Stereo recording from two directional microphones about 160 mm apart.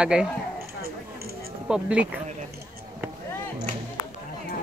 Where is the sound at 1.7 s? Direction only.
10° right (ahead or behind).